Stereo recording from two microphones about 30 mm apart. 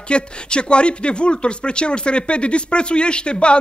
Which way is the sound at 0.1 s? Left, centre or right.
Left.